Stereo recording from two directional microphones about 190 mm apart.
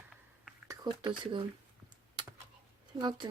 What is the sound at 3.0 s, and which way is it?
Speech, 25° right (ahead or behind).